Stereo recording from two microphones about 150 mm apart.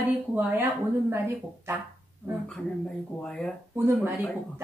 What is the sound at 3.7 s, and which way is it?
Speech, 15° right (ahead or behind).